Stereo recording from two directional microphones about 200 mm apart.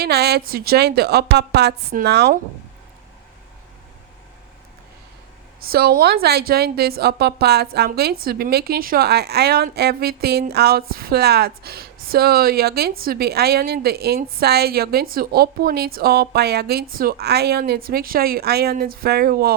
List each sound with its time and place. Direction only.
0.0 s a woman's voice: 55° right (ahead or behind)
5.6 s a woman's voice: 50° right (ahead or behind)